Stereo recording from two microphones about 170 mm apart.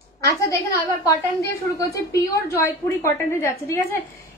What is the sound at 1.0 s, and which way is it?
A woman's voice, 20° left (ahead or behind).